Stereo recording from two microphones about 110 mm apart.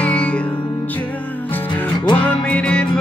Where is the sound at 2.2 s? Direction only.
10° left (ahead or behind).